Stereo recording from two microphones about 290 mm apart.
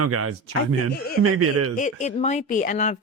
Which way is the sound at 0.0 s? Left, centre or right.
Right.